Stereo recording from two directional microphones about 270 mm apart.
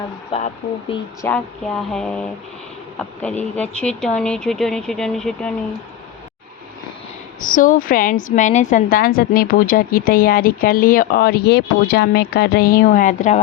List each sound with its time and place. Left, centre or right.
0.3 s speech: left
1.2 s speech: centre
7.4 s a woman's voice: left